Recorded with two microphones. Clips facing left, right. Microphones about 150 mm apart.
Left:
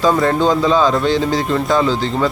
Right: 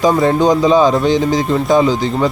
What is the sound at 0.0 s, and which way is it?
Speech, 15° right (ahead or behind).